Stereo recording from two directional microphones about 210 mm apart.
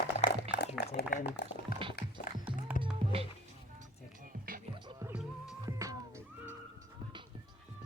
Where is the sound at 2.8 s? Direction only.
25° right (ahead or behind).